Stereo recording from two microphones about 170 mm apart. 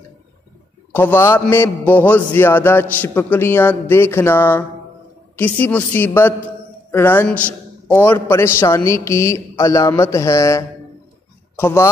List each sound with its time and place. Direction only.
0.9 s a man's voice: 10° left (ahead or behind)